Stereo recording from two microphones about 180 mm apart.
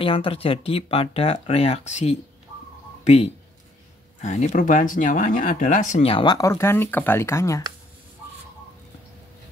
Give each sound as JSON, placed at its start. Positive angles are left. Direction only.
{"t": 0.0, "sound": "speech", "side_deg": 30}
{"t": 3.0, "sound": "a sound", "side_deg": 35}
{"t": 4.2, "sound": "speech", "side_deg": 40}